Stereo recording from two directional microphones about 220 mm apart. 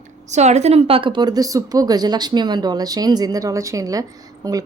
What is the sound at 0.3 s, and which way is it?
A woman's voice, 30° right (ahead or behind).